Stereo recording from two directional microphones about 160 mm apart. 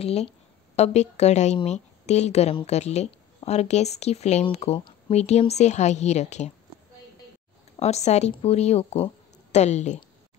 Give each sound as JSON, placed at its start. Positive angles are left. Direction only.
{"t": 0.0, "sound": "a woman's voice", "side_deg": 40}
{"t": 5.1, "sound": "a woman's voice", "side_deg": 45}
{"t": 7.8, "sound": "a woman's voice", "side_deg": 45}